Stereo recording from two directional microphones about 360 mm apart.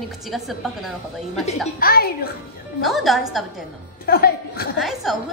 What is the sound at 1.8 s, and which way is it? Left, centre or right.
Speech, left.